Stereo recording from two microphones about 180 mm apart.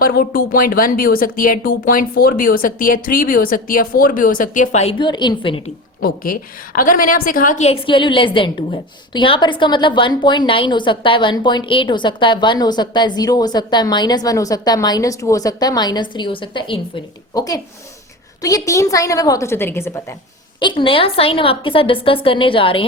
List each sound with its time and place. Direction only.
0.0 s speech: 55° left (ahead or behind); by 5.7 s 30° left (ahead or behind)
6.0 s a woman's voice: 55° left (ahead or behind); by 20.1 s 15° left (ahead or behind)
20.6 s a woman's voice: 25° left (ahead or behind)